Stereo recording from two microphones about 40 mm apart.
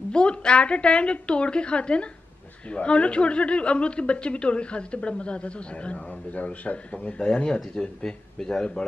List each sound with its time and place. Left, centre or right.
0.1 s a woman's voice: left
7.2 s a woman's voice: left